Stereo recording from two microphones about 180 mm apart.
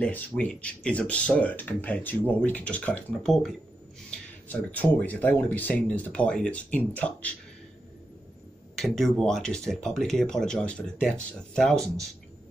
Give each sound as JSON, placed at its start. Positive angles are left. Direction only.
{"t": 0.0, "sound": "speech", "side_deg": 5}
{"t": 8.7, "sound": "speech", "side_deg": 0}